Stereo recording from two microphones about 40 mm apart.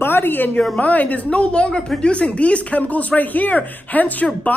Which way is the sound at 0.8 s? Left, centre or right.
Left.